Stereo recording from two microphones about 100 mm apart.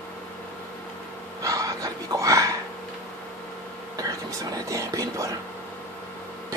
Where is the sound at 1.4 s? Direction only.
35° right (ahead or behind).